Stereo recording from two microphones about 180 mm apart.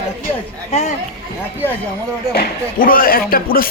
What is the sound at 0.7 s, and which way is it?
Speech, 40° left (ahead or behind).